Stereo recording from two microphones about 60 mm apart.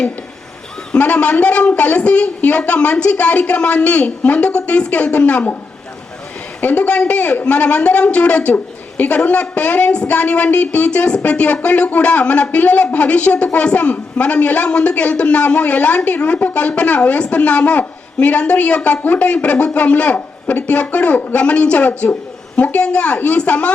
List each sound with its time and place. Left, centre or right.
0.9 s a man's voice: left
6.6 s a man's voice: left